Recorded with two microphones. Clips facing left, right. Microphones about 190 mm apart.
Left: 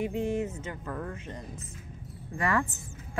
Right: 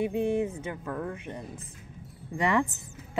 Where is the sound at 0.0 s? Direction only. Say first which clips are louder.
Right 3 dB; 15° right (ahead or behind).